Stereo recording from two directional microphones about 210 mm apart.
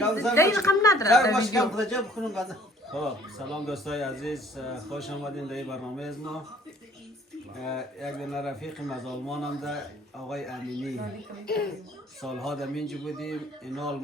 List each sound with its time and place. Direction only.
0.2 s a woman's voice: 15° left (ahead or behind)
1.5 s speech: centre (ahead or behind)
7.6 s speech: centre (ahead or behind)
11.4 s a child's voice: 50° left (ahead or behind)
12.2 s speech: centre (ahead or behind)